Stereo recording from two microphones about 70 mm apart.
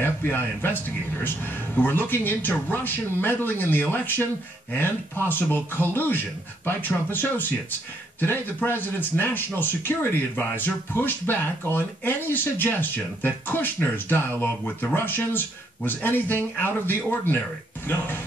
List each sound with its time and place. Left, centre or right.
0.0 s speech: left